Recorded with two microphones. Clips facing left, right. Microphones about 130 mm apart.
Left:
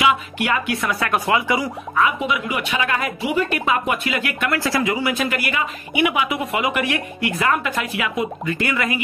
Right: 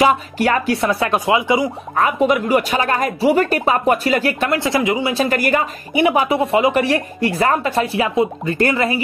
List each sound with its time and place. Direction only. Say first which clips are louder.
0.0 s speech: right 5 dB; 40° right (ahead or behind); by 1.7 s 20° right (ahead or behind)
2.0 s speech: right 5 dB; 40° right (ahead or behind)
4.5 s speech: even; 20° right (ahead or behind)